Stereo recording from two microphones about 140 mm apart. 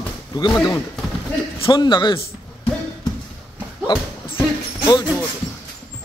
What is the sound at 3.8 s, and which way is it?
Music, 30° left (ahead or behind).